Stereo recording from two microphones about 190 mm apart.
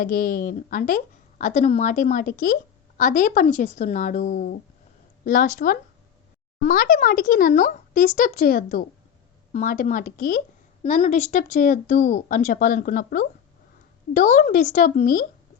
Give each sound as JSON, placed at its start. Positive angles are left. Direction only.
{"t": 0.0, "sound": "a woman's voice", "side_deg": 45}